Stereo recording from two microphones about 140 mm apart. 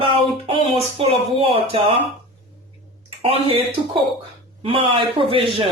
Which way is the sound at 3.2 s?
40° right (ahead or behind).